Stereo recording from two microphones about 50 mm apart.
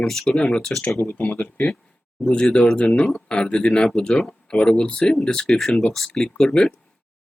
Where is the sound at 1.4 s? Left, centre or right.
Left.